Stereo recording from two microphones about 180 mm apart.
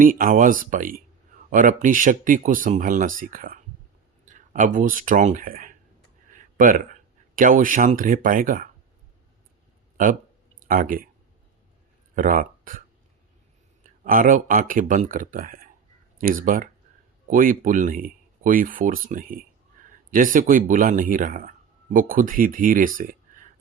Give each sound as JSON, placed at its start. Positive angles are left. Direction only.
{"t": 0.0, "sound": "speech", "side_deg": -50}
{"t": 10.6, "sound": "speech", "side_deg": -50}
{"t": 12.1, "sound": "speech", "side_deg": -50}
{"t": 13.8, "sound": "speech", "side_deg": -50}